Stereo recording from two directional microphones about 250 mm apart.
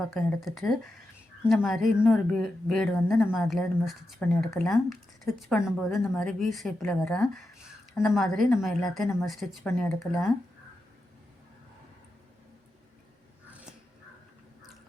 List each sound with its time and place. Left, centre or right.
0.1 s a woman's voice: centre